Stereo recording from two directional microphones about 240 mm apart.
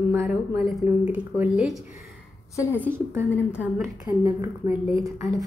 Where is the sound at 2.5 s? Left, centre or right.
Centre.